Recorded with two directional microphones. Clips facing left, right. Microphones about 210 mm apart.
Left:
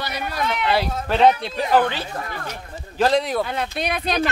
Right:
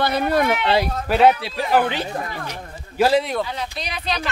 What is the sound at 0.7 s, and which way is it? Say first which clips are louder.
Speech: right 2 dB; 10° right (ahead or behind).